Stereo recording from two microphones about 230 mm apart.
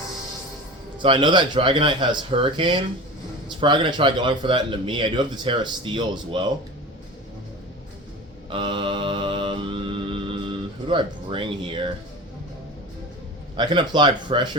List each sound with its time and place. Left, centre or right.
0.9 s a man's voice: right
8.4 s mantra: right
13.6 s a man's voice: centre